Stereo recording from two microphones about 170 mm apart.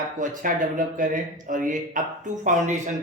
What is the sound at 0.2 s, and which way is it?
A man's voice, 50° right (ahead or behind).